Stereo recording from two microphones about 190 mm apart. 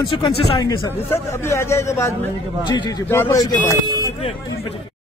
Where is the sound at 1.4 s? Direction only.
15° left (ahead or behind).